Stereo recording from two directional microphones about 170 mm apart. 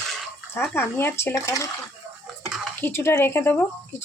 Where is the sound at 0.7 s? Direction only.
15° left (ahead or behind).